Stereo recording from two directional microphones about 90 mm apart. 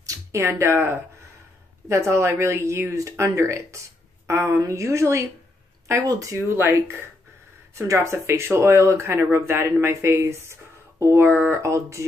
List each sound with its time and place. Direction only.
0.0 s speech: 35° right (ahead or behind)
11.5 s speech: 35° right (ahead or behind)